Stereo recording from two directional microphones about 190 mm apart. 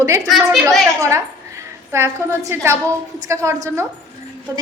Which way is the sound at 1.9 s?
15° right (ahead or behind).